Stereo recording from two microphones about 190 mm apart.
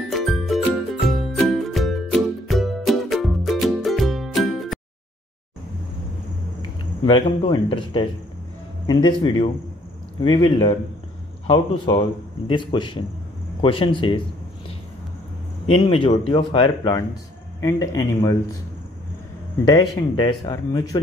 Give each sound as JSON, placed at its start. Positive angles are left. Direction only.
{"t": 0.1, "sound": "music", "side_deg": 0}
{"t": 7.1, "sound": "speech", "side_deg": 25}
{"t": 15.6, "sound": "speech", "side_deg": 30}
{"t": 19.7, "sound": "speech", "side_deg": 20}